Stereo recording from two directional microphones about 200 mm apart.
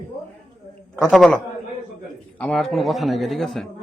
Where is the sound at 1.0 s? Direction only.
Centre (ahead or behind).